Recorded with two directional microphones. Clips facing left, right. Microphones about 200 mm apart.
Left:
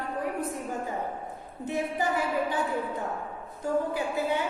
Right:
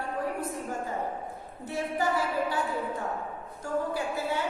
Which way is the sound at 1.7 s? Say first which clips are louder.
Even; 20° left (ahead or behind).